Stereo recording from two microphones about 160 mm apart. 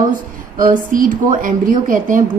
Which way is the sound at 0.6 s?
60° right (ahead or behind).